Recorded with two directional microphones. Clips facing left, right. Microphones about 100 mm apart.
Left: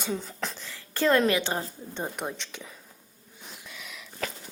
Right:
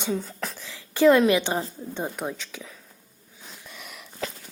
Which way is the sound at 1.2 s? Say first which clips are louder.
Right 4 dB; 15° right (ahead or behind).